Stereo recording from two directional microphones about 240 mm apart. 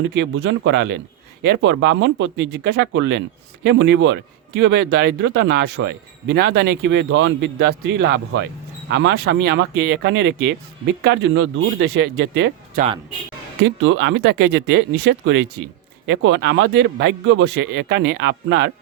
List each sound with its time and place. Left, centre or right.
0.1 s speech: right
13.8 s speech: right